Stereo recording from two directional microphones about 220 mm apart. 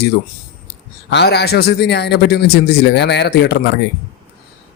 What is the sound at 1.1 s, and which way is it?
Speech, 50° left (ahead or behind).